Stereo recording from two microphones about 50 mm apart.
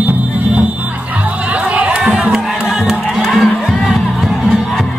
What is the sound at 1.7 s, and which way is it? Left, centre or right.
Music, right.